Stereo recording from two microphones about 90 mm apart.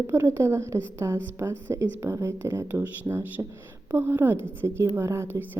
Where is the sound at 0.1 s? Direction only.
30° right (ahead or behind).